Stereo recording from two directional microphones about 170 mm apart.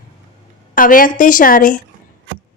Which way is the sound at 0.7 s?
55° left (ahead or behind).